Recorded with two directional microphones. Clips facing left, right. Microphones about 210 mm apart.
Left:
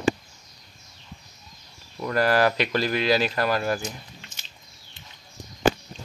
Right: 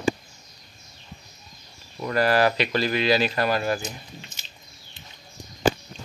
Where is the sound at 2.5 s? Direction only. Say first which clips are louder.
Even; 45° left (ahead or behind).